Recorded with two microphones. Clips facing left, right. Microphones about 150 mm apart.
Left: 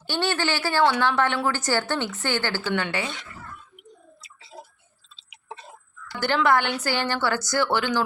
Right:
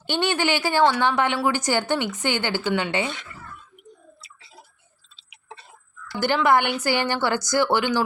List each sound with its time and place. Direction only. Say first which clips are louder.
0.1 s a woman's voice: right 2 dB; 15° right (ahead or behind)
6.1 s a woman's voice: right 2 dB; 10° right (ahead or behind)